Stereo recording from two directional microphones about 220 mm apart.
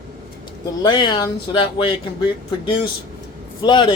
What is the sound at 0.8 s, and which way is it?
Speech, 20° left (ahead or behind).